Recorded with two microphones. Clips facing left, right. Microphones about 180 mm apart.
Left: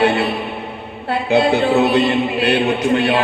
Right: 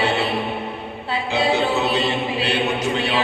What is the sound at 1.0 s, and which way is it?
Chant, 60° left (ahead or behind).